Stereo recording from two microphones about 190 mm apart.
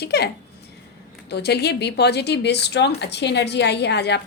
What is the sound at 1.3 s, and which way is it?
Speech, 60° left (ahead or behind).